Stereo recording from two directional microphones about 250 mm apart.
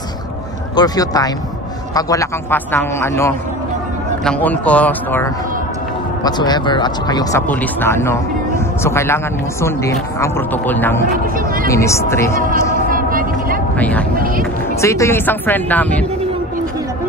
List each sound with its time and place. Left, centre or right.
0.7 s speech: centre
12.9 s vehicle: right
13.7 s speech: centre
14.1 s speech: right
14.8 s speech: centre